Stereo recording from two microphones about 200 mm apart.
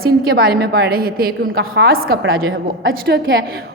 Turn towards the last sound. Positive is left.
turn(degrees=-50)  # may be behind; listen again after turning